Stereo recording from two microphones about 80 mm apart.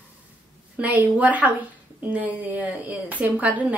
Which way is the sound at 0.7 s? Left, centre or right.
Centre.